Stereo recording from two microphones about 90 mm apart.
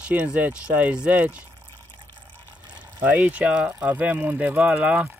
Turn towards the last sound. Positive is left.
turn(degrees=-10)  # may be behind; listen again after turning